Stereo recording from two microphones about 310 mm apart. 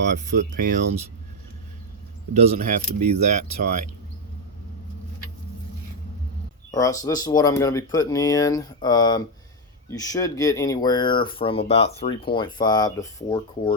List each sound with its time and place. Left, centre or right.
0.1 s speech: right
2.3 s speech: right
6.7 s speech: centre